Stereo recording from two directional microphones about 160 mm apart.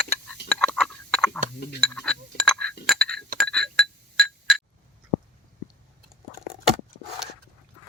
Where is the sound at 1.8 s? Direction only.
5° left (ahead or behind).